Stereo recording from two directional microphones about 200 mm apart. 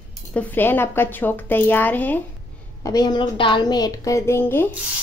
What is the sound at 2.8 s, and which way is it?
A woman's voice, 20° left (ahead or behind).